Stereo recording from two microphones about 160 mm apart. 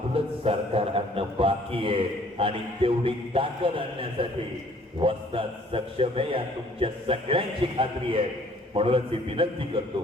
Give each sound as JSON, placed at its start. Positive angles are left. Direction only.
{"t": 0.1, "sound": "a man's voice", "side_deg": -35}